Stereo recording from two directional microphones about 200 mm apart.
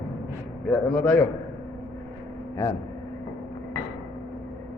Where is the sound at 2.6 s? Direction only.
15° left (ahead or behind).